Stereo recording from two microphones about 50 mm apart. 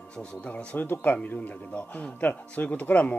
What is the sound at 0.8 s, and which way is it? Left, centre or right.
A man's voice, left.